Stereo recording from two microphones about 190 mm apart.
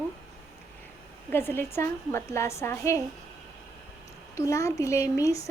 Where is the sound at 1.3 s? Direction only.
10° left (ahead or behind).